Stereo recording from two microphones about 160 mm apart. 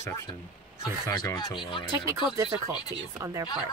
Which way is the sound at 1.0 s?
20° left (ahead or behind).